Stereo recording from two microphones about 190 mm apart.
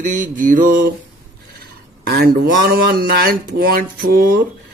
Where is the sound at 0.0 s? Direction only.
45° right (ahead or behind).